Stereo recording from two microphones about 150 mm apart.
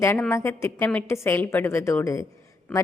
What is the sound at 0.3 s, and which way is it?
A woman's voice, 15° left (ahead or behind).